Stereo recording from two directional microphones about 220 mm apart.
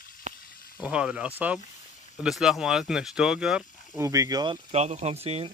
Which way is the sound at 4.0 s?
15° right (ahead or behind).